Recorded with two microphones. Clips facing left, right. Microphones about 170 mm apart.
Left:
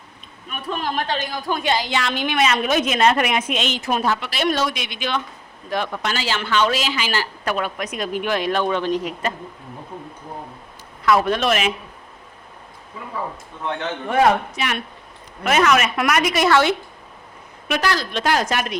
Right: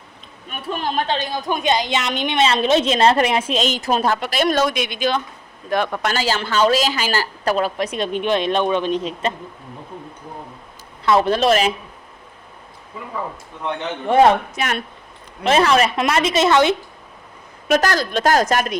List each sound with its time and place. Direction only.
0.8 s a woman's voice: 30° right (ahead or behind)
5.7 s a woman's voice: 55° right (ahead or behind); by 9.3 s 25° right (ahead or behind)
11.0 s a woman's voice: 25° right (ahead or behind)
14.5 s a woman's voice: 45° right (ahead or behind)
15.4 s a woman's voice: 30° right (ahead or behind)
17.7 s a woman's voice: 45° right (ahead or behind)